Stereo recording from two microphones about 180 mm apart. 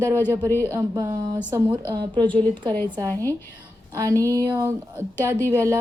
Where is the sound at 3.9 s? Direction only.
20° right (ahead or behind).